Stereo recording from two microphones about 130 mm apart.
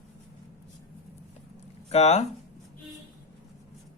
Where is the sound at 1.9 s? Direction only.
55° left (ahead or behind).